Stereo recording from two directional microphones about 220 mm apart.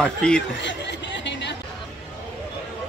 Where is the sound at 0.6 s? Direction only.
55° left (ahead or behind).